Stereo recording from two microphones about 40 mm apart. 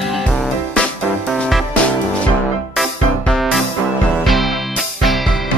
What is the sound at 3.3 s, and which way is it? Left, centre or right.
Music, centre.